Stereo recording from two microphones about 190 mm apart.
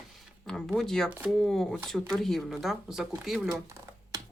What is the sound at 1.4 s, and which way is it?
Speech, centre (ahead or behind).